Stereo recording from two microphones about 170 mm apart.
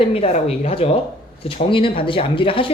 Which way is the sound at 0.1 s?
40° left (ahead or behind).